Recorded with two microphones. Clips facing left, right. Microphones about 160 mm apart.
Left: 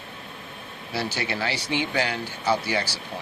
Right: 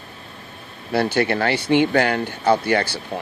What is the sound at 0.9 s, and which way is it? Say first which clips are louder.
Speech: right 9 dB; 55° right (ahead or behind).